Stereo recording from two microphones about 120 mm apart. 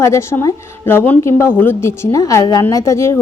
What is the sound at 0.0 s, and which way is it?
A woman's voice, 25° left (ahead or behind).